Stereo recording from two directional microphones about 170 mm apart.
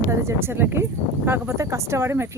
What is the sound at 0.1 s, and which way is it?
Speech, 15° right (ahead or behind).